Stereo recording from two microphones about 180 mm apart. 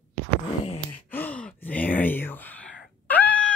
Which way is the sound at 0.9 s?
10° left (ahead or behind).